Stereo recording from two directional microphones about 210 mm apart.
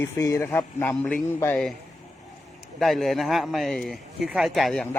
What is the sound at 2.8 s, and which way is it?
Speech, centre (ahead or behind).